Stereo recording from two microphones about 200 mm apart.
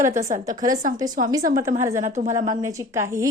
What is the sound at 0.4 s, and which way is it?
A woman's voice, 15° right (ahead or behind).